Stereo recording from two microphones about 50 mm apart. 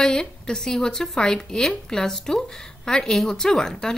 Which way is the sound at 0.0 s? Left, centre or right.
Centre.